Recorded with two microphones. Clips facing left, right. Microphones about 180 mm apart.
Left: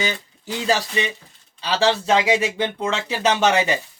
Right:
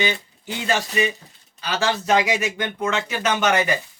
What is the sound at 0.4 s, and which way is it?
Speech, 35° left (ahead or behind).